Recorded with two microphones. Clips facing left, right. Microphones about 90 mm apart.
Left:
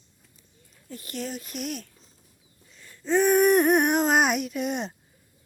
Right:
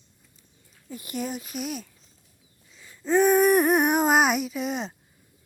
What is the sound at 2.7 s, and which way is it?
Wheeze, 10° right (ahead or behind).